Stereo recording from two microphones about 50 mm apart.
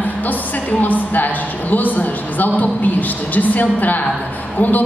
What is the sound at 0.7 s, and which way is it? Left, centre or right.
A woman's voice, left.